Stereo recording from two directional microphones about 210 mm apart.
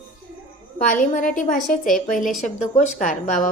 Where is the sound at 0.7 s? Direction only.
40° left (ahead or behind).